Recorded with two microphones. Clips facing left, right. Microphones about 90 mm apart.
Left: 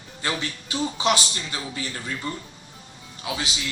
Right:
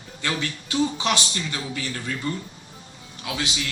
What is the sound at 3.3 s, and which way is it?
Speech, 25° left (ahead or behind).